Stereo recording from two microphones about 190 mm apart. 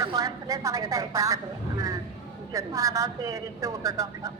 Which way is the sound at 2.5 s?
15° right (ahead or behind).